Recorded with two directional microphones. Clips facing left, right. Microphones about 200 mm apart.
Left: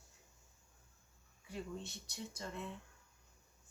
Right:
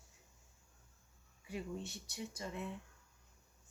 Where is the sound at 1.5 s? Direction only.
5° right (ahead or behind).